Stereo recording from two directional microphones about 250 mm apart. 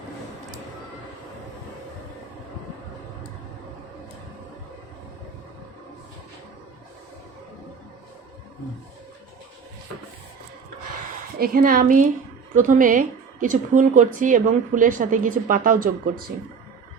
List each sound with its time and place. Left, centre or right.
11.3 s a woman's voice: right